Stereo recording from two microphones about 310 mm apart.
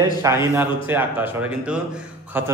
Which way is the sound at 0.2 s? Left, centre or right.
Centre.